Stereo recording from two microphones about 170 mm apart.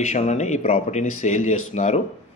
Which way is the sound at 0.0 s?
45° left (ahead or behind).